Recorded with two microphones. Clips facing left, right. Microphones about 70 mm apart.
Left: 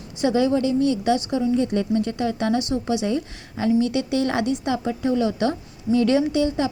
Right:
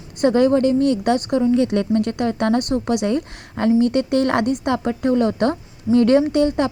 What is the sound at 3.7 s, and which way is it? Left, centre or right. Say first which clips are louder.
A woman's voice: right 4 dB; right.